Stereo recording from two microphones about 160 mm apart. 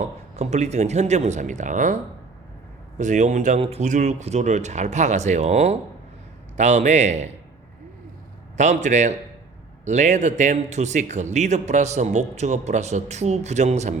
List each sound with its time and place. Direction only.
0.0 s speech: 45° right (ahead or behind)
3.0 s speech: 50° right (ahead or behind)
8.5 s speech: 50° right (ahead or behind)